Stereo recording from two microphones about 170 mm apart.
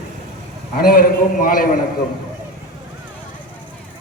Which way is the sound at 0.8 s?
60° left (ahead or behind).